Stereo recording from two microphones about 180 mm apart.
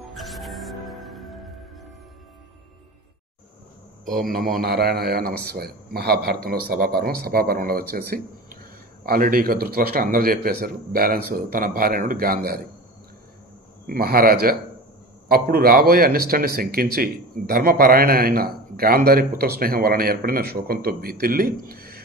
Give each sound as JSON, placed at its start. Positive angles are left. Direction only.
{"t": 0.1, "sound": "music", "side_deg": 0}
{"t": 4.0, "sound": "a man's voice", "side_deg": 0}
{"t": 4.3, "sound": "a man's voice", "side_deg": -50}
{"t": 13.8, "sound": "a man's voice", "side_deg": -55}